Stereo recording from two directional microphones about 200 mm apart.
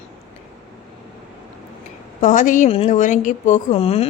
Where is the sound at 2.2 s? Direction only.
40° left (ahead or behind).